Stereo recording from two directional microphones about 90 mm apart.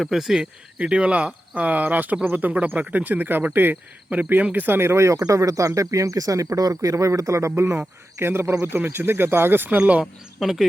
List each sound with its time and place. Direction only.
0.0 s speech: 5° right (ahead or behind)
10.4 s speech: 5° right (ahead or behind)